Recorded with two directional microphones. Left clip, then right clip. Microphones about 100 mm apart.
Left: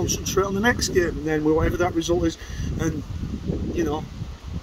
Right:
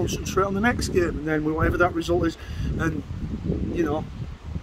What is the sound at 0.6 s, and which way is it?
Speech, 30° right (ahead or behind).